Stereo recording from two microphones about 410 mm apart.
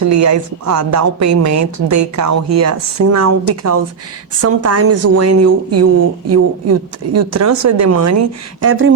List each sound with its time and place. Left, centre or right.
0.0 s a woman's voice: right